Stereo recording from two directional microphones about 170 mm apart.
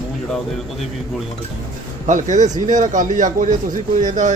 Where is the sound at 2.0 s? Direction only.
45° right (ahead or behind).